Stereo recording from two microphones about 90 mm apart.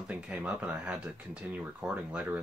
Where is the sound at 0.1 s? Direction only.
15° right (ahead or behind).